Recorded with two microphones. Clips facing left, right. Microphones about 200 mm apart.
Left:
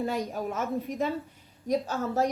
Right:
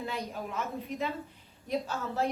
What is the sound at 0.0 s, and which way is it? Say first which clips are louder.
A woman's voice: left 6 dB; 45° left (ahead or behind).